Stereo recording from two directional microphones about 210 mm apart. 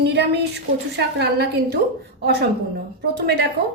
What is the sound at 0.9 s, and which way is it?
Speech, 50° right (ahead or behind).